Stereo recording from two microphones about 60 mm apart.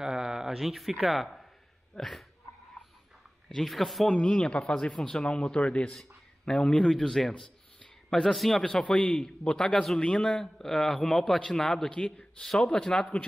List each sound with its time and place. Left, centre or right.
0.0 s a sound: centre
0.6 s speech: centre
3.4 s speech: centre
4.1 s a man's voice: centre
8.9 s a man's voice: centre